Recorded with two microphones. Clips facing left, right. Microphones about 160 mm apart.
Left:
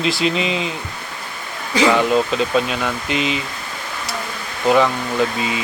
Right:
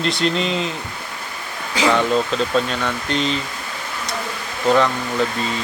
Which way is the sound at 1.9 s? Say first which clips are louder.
Even; 5° left (ahead or behind).